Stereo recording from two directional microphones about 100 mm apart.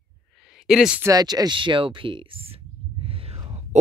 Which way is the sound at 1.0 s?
40° right (ahead or behind).